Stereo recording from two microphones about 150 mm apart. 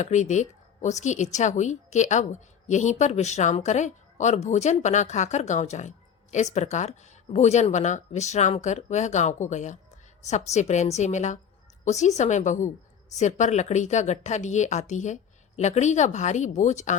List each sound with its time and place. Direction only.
0.0 s speech: 55° left (ahead or behind)